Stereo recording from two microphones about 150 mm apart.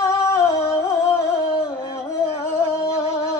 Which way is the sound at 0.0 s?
20° left (ahead or behind).